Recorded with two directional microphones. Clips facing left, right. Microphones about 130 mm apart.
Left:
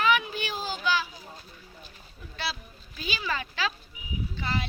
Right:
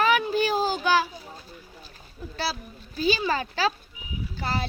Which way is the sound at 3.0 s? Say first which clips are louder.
Right 8 dB; 35° right (ahead or behind).